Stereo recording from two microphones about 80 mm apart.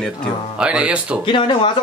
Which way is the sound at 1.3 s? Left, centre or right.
Left.